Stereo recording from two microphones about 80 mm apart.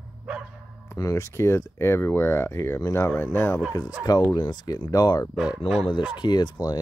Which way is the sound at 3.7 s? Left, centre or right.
Left.